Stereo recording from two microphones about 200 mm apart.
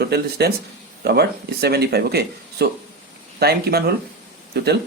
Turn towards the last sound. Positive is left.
turn(degrees=-55)  # may be behind; listen again after turning